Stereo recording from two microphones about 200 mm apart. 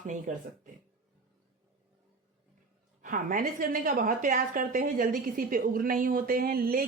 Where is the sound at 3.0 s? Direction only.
40° right (ahead or behind).